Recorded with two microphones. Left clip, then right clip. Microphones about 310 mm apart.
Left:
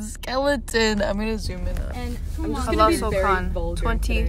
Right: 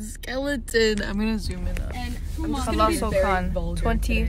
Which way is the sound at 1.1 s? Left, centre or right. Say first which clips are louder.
Left 1 dB; centre.